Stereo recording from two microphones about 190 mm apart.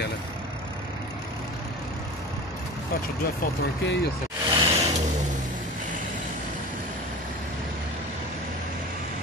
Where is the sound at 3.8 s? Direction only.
65° left (ahead or behind).